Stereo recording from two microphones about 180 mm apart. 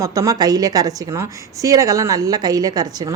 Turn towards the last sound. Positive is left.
turn(degrees=-20)  # may be behind; listen again after turning